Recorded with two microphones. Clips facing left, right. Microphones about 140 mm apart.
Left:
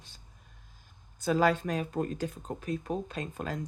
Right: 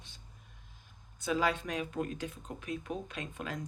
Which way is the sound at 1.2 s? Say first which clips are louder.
Left 5 dB; 40° left (ahead or behind).